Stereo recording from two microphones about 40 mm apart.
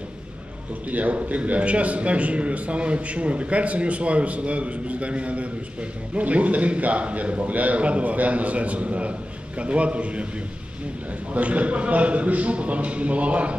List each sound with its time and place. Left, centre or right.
0.8 s a man's voice: right
11.3 s a man's voice: right